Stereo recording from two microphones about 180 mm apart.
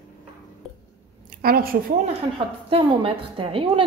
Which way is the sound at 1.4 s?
55° right (ahead or behind).